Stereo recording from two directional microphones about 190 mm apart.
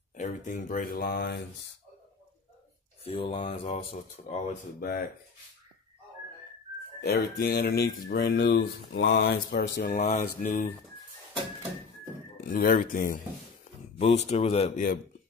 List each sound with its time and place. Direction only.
0.1 s speech: 40° left (ahead or behind)
3.0 s speech: 30° left (ahead or behind)
4.7 s speech: 50° left (ahead or behind)
7.0 s speech: 60° left (ahead or behind)
9.9 s speech: 35° left (ahead or behind)
12.4 s speech: 50° left (ahead or behind)
13.9 s speech: 35° left (ahead or behind)